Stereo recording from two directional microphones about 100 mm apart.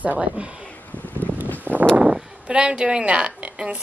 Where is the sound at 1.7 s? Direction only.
20° right (ahead or behind).